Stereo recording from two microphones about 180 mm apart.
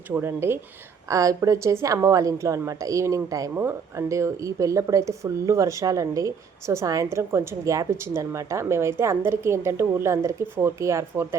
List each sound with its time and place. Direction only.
0.1 s a woman's voice: 15° right (ahead or behind)